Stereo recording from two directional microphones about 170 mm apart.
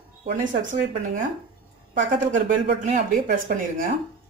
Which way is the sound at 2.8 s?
45° right (ahead or behind).